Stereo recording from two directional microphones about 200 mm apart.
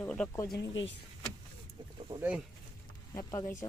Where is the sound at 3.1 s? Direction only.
15° left (ahead or behind).